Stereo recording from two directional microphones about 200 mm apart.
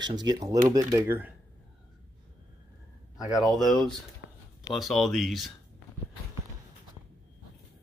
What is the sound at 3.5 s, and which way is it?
Speech, centre (ahead or behind).